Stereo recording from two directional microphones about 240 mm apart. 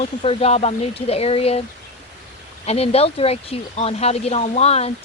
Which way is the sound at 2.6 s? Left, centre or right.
Left.